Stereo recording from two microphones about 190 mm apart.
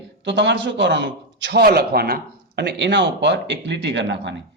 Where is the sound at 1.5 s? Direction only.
55° right (ahead or behind).